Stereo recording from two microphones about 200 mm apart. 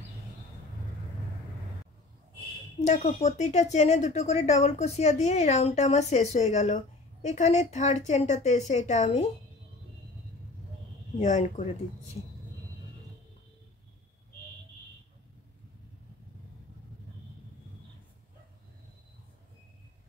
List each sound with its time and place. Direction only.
2.8 s a woman's voice: 35° left (ahead or behind)
11.1 s a woman's voice: 35° left (ahead or behind)